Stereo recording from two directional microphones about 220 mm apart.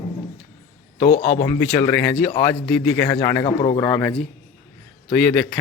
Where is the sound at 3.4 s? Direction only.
25° left (ahead or behind).